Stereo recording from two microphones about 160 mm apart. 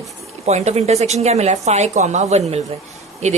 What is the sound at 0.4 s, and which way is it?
A woman's voice, 45° right (ahead or behind).